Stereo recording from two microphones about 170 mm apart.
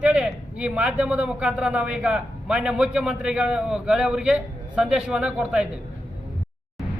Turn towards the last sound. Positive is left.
turn(degrees=-5)  # may be behind; listen again after turning